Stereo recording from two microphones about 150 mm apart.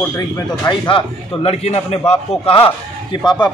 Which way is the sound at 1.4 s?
40° left (ahead or behind).